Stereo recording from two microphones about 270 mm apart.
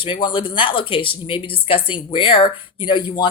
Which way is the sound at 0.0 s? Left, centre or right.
Centre.